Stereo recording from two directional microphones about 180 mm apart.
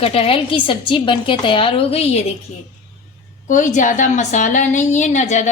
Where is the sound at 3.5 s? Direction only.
45° left (ahead or behind).